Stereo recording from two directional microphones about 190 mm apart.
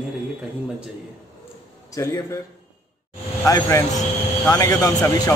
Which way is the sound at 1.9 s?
15° left (ahead or behind).